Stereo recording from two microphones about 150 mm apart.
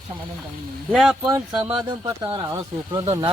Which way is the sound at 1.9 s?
30° right (ahead or behind).